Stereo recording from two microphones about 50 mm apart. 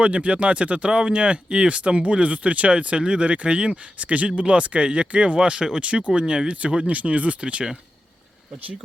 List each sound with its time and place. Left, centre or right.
0.0 s speech: right